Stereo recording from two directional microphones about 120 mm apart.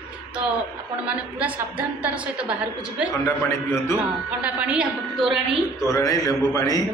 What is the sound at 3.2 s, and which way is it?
Speech, 25° left (ahead or behind).